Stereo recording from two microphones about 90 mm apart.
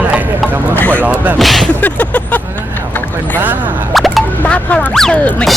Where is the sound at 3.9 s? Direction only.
Centre (ahead or behind).